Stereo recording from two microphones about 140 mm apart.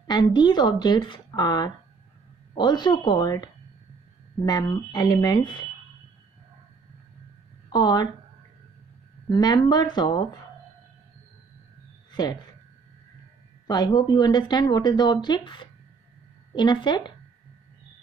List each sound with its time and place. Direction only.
0.0 s speech: 30° left (ahead or behind)
4.5 s speech: 30° left (ahead or behind)
7.7 s speech: 30° left (ahead or behind)
9.3 s speech: 30° left (ahead or behind)
12.1 s speech: 30° left (ahead or behind)
13.7 s speech: 30° left (ahead or behind)